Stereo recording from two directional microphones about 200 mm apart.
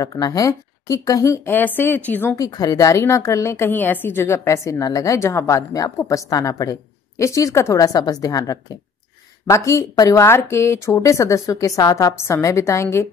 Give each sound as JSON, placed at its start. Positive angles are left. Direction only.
{"t": 0.0, "sound": "speech", "side_deg": 20}
{"t": 9.7, "sound": "speech", "side_deg": 15}